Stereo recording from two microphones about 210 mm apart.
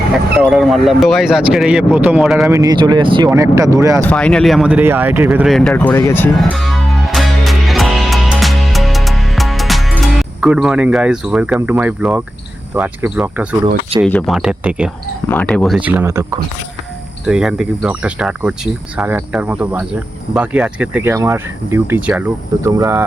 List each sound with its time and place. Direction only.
0.3 s speech: centre (ahead or behind)
2.5 s speech: 15° right (ahead or behind)
4.0 s a sound: 5° left (ahead or behind)
12.7 s speech: 10° right (ahead or behind)
14.0 s speech: 5° left (ahead or behind)
15.3 s speech: 5° left (ahead or behind); by 16.4 s 15° right (ahead or behind)
17.2 s speech: centre (ahead or behind)